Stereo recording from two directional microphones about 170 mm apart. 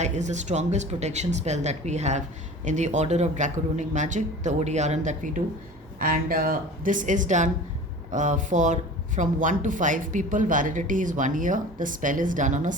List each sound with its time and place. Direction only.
0.0 s speech: 45° right (ahead or behind)